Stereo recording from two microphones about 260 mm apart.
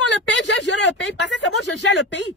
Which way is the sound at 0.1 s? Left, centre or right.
Left.